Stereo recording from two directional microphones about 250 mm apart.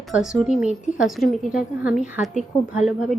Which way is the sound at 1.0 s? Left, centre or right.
Centre.